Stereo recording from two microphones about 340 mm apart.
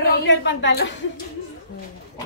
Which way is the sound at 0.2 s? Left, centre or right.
Left.